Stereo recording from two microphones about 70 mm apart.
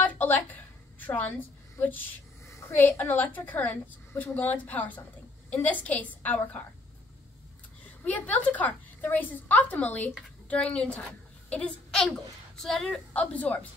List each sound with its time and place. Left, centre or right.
0.0 s a sound: left
1.8 s a woman's voice: left
7.8 s a woman's voice: centre
13.1 s a woman's voice: left